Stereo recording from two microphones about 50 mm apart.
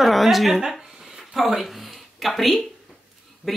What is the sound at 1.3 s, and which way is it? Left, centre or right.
Speech, centre.